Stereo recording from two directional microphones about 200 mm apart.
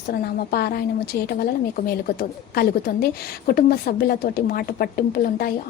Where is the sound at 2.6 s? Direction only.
50° left (ahead or behind).